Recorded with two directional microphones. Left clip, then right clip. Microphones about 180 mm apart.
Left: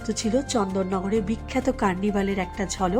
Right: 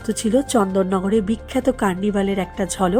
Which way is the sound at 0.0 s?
25° right (ahead or behind).